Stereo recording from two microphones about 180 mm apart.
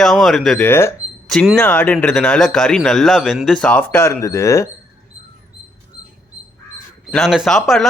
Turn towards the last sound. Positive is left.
turn(degrees=0)  # may be behind; listen again after turning